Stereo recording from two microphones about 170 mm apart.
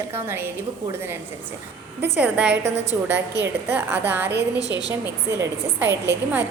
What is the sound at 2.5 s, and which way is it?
Speech, 90° right.